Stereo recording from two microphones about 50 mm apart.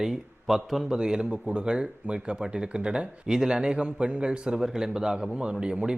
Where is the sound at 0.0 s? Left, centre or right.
Centre.